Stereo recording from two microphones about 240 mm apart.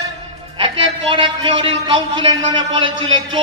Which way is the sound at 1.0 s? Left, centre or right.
Right.